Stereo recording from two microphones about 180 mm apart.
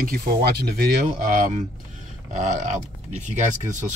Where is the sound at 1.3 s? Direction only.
45° right (ahead or behind).